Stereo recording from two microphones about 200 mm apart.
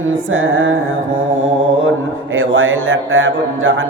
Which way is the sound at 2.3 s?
75° right (ahead or behind).